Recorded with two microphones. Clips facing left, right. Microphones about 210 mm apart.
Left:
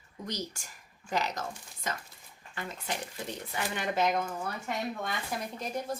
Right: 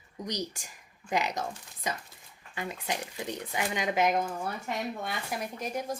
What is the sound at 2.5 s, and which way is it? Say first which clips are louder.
Speech: right 3 dB; 15° right (ahead or behind).